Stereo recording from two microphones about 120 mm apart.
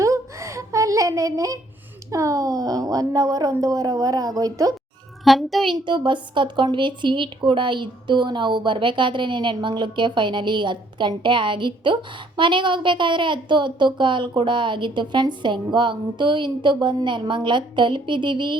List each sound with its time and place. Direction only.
0.0 s a sound: 25° right (ahead or behind)
2.0 s a woman's voice: 25° right (ahead or behind)
5.2 s a child's voice: centre (ahead or behind)
5.8 s a woman's voice: 40° right (ahead or behind)